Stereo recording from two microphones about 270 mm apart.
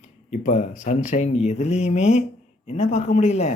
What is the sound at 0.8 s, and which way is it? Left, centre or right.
Speech, left.